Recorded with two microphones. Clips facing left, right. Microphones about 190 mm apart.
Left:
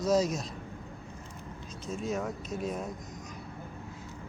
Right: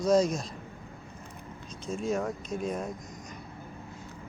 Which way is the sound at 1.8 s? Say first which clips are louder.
Right 3 dB; centre (ahead or behind).